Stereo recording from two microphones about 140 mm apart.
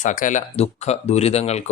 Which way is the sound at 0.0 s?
70° left (ahead or behind).